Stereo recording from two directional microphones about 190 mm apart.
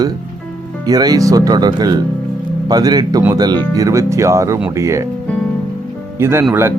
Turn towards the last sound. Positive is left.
turn(degrees=-15)  # may be behind; listen again after turning